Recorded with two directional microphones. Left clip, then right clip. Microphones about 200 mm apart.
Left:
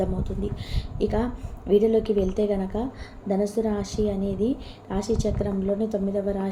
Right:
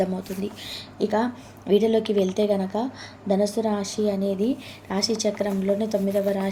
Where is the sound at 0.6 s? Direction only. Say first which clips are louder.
Right 1 dB; 10° right (ahead or behind).